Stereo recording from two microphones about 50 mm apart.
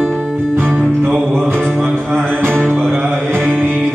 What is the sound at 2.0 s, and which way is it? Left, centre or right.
Music, right.